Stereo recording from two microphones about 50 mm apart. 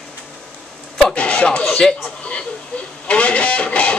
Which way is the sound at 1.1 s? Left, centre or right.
Left.